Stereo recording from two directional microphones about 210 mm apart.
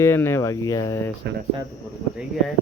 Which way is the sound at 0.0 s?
10° left (ahead or behind).